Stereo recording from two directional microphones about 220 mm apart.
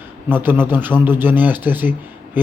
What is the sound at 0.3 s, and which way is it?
Speech, 10° right (ahead or behind).